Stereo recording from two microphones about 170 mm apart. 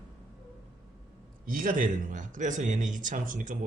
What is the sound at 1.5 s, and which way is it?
Speech, 55° right (ahead or behind).